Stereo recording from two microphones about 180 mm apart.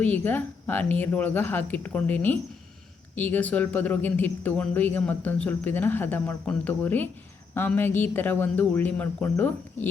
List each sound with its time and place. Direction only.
0.0 s speech: 10° left (ahead or behind)